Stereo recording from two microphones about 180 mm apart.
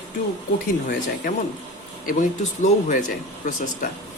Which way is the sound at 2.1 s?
45° left (ahead or behind).